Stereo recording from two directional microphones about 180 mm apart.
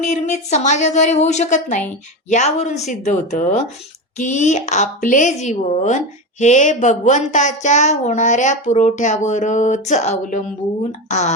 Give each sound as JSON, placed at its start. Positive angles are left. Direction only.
{"t": 0.0, "sound": "a woman's voice", "side_deg": 40}